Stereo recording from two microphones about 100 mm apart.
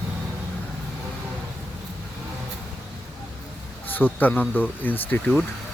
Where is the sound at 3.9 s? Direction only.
20° left (ahead or behind).